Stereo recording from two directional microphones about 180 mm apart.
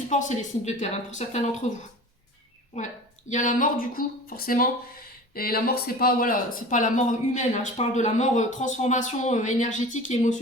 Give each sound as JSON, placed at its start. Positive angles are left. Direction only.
{"t": 0.1, "sound": "speech", "side_deg": 40}
{"t": 2.7, "sound": "speech", "side_deg": 40}